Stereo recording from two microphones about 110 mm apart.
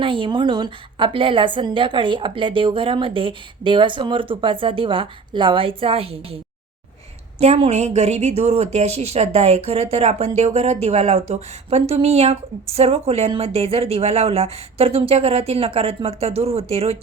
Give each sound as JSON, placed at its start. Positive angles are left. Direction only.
{"t": 0.0, "sound": "a woman's voice", "side_deg": -50}
{"t": 7.3, "sound": "speech", "side_deg": -70}